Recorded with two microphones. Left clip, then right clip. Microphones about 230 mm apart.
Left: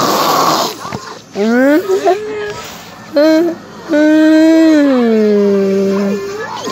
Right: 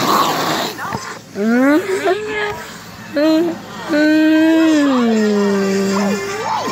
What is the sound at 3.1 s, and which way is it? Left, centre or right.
Speech, left.